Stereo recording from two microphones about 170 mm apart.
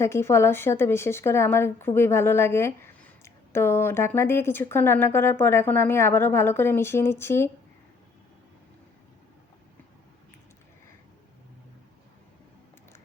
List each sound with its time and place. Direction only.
0.0 s a woman's voice: 15° left (ahead or behind)